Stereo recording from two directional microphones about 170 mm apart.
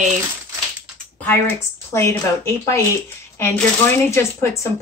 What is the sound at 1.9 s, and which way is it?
Speech, 15° left (ahead or behind).